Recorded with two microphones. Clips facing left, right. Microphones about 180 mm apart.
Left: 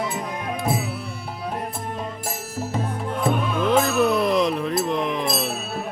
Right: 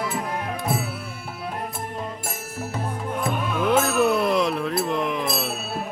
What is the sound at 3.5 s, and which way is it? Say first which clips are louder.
Music: right 1 dB; 5° right (ahead or behind).